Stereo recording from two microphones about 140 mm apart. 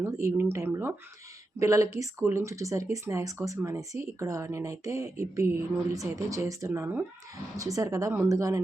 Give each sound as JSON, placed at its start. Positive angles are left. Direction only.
{"t": 0.0, "sound": "speech", "side_deg": -20}